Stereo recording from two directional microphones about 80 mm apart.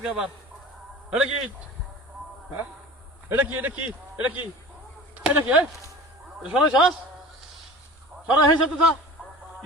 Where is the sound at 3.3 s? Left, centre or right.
Right.